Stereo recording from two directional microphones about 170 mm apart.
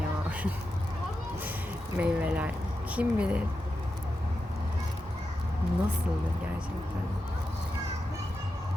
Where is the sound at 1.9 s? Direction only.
10° right (ahead or behind).